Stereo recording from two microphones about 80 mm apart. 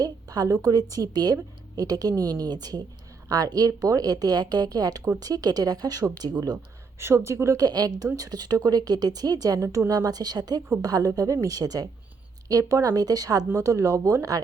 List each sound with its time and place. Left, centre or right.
0.0 s speech: right
7.0 s speech: right
7.6 s a woman's voice: right
13.5 s speech: right